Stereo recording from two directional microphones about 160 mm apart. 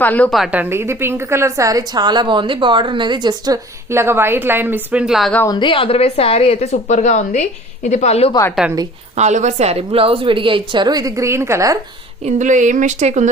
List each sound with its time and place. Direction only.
0.0 s a woman's voice: 10° left (ahead or behind)
5.5 s a woman's voice: 30° left (ahead or behind)
8.3 s a woman's voice: 20° left (ahead or behind)
9.1 s a woman's voice: 45° right (ahead or behind); by 11.8 s 20° right (ahead or behind)
12.2 s speech: 50° right (ahead or behind)